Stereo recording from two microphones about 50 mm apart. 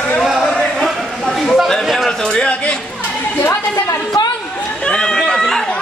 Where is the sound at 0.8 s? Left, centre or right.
Centre.